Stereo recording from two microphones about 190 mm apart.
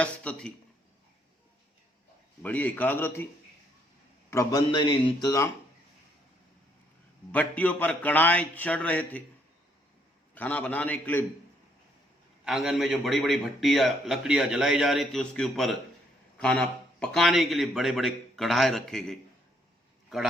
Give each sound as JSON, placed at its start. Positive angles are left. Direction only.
{"t": 0.0, "sound": "a man's voice", "side_deg": 5}
{"t": 2.4, "sound": "a man's voice", "side_deg": 10}
{"t": 4.3, "sound": "a man's voice", "side_deg": 15}
{"t": 7.3, "sound": "a man's voice", "side_deg": 10}
{"t": 10.3, "sound": "a man's voice", "side_deg": 10}
{"t": 12.5, "sound": "a man's voice", "side_deg": 0}